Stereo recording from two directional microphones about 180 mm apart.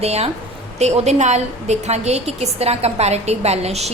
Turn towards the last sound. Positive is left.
turn(degrees=-35)  # may be behind; listen again after turning